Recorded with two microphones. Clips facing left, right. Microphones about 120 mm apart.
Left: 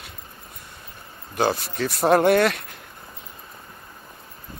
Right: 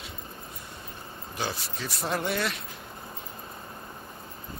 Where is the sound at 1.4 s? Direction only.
65° left (ahead or behind).